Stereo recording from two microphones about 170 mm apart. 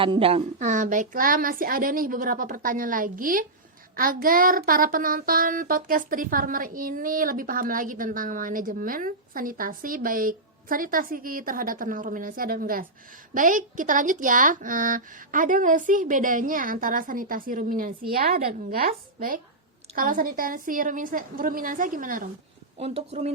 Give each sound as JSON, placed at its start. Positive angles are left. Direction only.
{"t": 0.0, "sound": "speech", "side_deg": -35}
{"t": 3.9, "sound": "child singing", "side_deg": -55}
{"t": 13.3, "sound": "speech", "side_deg": -50}
{"t": 20.0, "sound": "child singing", "side_deg": -55}
{"t": 22.8, "sound": "speech", "side_deg": -35}